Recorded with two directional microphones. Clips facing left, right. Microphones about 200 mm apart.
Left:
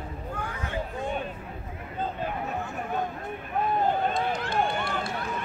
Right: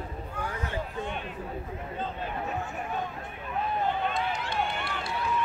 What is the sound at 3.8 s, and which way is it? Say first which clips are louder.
Run: left 3 dB; 45° left (ahead or behind).